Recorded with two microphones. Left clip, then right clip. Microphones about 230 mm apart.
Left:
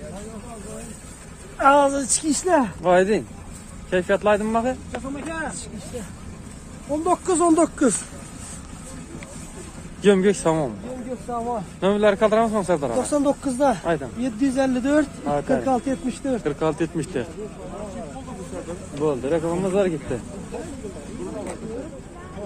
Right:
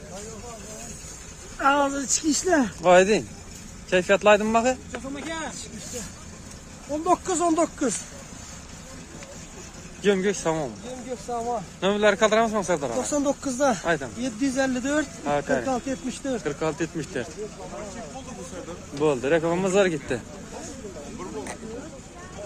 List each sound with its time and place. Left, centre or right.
1.6 s speech: left; by 2.7 s centre
2.8 s speech: right
7.1 s speech: centre
10.0 s speech: centre
11.3 s speech: right
11.8 s speech: centre
13.5 s speech: centre
14.4 s speech: centre
15.2 s speech: centre
15.6 s speech: centre
16.4 s speech: centre
18.9 s speech: right